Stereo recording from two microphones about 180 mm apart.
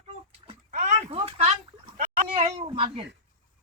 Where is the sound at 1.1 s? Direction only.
30° right (ahead or behind).